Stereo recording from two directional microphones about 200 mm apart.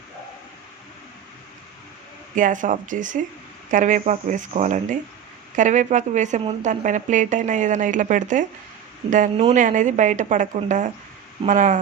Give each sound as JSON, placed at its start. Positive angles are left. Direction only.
{"t": 2.3, "sound": "a woman's voice", "side_deg": -40}